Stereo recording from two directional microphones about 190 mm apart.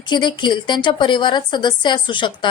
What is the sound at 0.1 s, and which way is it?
A woman's voice, 25° left (ahead or behind).